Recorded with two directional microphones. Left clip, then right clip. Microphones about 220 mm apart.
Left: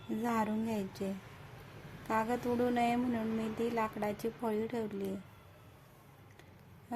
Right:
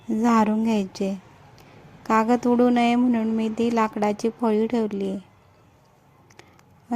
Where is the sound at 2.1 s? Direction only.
35° right (ahead or behind).